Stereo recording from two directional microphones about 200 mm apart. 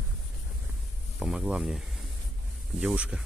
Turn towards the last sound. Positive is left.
turn(degrees=-5)  # may be behind; listen again after turning